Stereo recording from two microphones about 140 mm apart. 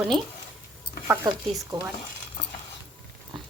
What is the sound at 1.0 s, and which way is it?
Speech, 20° right (ahead or behind).